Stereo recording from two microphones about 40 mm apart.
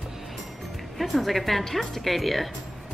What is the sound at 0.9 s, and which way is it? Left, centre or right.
A woman's voice, centre.